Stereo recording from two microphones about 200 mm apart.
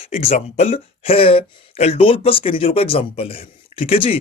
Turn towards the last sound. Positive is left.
turn(degrees=30)  # may be behind; listen again after turning